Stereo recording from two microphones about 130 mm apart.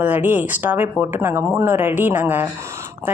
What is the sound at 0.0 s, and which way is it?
Speech, 15° right (ahead or behind).